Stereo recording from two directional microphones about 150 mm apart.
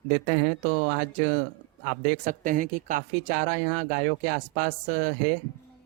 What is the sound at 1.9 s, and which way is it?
Speech, 65° right (ahead or behind).